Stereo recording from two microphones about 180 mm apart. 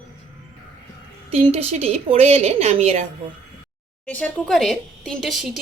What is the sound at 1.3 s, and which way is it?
A woman's voice, 35° right (ahead or behind).